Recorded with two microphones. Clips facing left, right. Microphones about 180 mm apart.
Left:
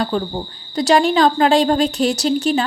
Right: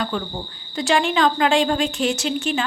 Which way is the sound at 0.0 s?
35° left (ahead or behind).